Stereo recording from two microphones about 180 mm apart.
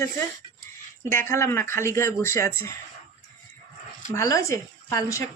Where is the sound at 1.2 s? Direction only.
15° left (ahead or behind).